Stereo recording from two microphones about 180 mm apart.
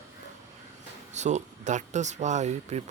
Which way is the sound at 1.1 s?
40° right (ahead or behind).